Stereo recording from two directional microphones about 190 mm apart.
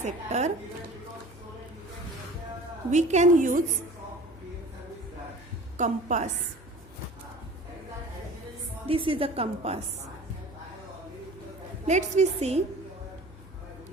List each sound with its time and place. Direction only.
0.0 s a woman's voice: 35° right (ahead or behind)
2.9 s a woman's voice: 40° right (ahead or behind)
5.7 s a woman's voice: 40° right (ahead or behind)
8.9 s a woman's voice: 30° right (ahead or behind)
11.9 s a woman's voice: 40° right (ahead or behind)